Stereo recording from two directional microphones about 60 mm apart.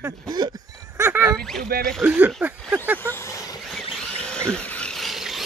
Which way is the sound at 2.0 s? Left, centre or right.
Right.